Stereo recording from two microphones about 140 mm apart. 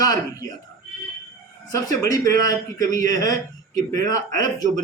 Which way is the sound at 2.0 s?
25° left (ahead or behind).